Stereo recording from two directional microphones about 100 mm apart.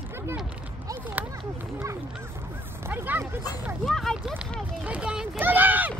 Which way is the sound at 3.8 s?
5° left (ahead or behind).